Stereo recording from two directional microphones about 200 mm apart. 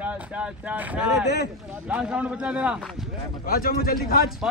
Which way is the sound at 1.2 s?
60° left (ahead or behind).